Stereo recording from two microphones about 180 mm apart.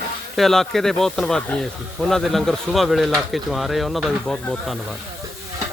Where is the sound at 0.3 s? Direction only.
Centre (ahead or behind).